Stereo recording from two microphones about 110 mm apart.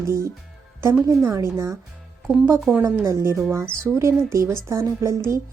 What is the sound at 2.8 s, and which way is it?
Speech, 25° right (ahead or behind).